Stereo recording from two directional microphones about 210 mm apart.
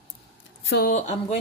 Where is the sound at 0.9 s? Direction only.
35° left (ahead or behind).